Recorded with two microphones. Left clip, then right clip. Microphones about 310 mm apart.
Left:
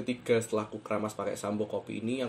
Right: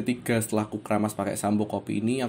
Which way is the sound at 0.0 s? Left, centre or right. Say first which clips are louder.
Right 1 dB; right.